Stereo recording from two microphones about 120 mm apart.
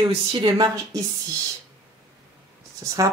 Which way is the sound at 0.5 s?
30° right (ahead or behind).